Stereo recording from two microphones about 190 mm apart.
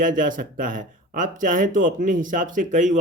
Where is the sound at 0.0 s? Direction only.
45° right (ahead or behind).